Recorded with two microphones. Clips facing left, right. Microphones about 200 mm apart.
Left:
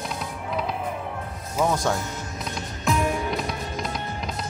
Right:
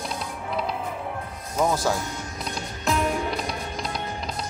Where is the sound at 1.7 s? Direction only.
5° right (ahead or behind).